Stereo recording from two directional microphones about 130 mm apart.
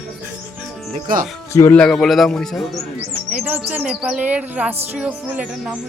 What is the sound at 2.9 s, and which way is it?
Music, 15° right (ahead or behind).